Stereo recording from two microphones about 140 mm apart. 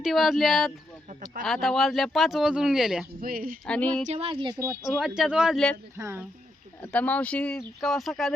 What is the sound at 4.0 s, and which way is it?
Speech, 45° right (ahead or behind).